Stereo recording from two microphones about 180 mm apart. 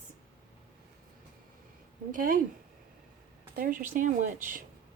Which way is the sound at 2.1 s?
50° right (ahead or behind).